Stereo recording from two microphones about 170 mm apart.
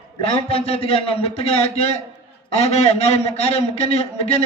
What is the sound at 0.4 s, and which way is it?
A man's voice, 35° left (ahead or behind).